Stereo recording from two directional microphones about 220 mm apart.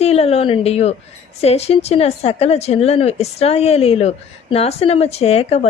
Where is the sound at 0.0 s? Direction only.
30° left (ahead or behind).